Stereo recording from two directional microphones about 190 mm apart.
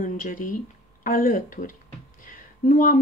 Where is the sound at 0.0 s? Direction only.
45° left (ahead or behind).